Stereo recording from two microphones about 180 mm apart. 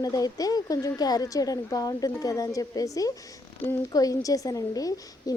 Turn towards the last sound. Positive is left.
turn(degrees=20)  # may be behind; listen again after turning